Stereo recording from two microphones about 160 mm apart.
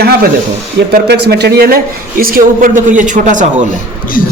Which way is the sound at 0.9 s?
90° right.